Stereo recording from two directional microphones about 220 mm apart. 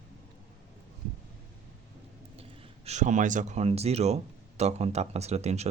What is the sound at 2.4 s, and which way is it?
Speech, 30° right (ahead or behind).